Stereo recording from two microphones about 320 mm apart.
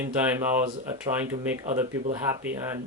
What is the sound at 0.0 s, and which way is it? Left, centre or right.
Speech, centre.